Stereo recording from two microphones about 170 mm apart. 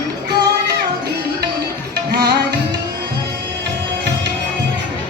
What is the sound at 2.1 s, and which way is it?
Music, 70° right (ahead or behind).